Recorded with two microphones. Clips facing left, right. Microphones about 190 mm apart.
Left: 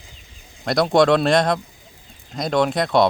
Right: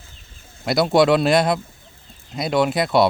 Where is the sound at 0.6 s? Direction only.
5° right (ahead or behind).